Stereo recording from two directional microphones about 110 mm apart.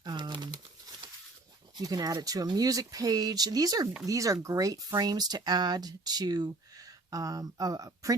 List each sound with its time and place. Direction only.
0.0 s crumpling: 40° right (ahead or behind)
1.7 s speech: 35° right (ahead or behind)